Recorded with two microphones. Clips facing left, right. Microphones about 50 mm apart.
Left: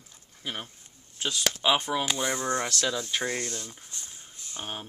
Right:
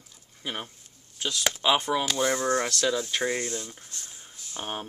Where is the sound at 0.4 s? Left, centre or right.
Centre.